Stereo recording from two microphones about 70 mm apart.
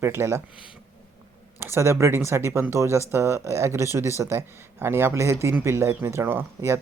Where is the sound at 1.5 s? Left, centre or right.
Right.